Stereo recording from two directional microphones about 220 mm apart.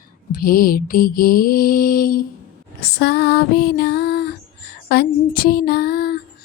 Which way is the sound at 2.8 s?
45° left (ahead or behind).